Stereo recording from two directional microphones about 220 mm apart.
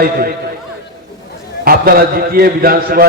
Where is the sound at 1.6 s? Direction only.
40° right (ahead or behind).